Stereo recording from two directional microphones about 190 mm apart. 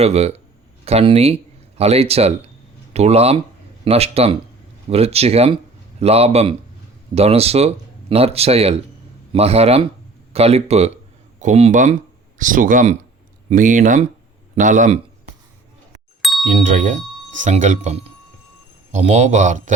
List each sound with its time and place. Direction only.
0.0 s speech: 35° right (ahead or behind)
16.2 s bicycle bell: centre (ahead or behind)
16.6 s speech: 40° right (ahead or behind)